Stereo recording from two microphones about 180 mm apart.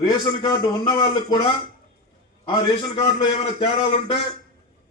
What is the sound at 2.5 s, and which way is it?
A man's voice, 25° left (ahead or behind).